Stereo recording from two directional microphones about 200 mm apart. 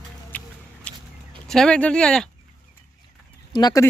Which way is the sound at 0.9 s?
5° left (ahead or behind).